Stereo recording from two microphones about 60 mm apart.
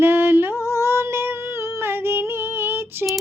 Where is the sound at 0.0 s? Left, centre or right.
Right.